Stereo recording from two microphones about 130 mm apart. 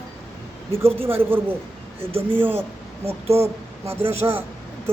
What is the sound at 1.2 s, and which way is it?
Speech, 15° right (ahead or behind).